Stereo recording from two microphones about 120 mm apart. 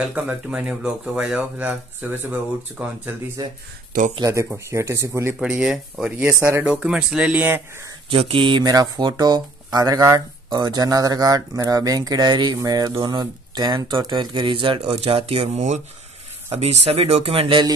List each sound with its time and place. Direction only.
0.1 s speech: 10° right (ahead or behind)
3.4 s speech: 30° right (ahead or behind)
5.4 s speech: 5° right (ahead or behind)
8.1 s speech: 50° right (ahead or behind); by 15.8 s 70° right (ahead or behind)
16.4 s speech: 60° right (ahead or behind)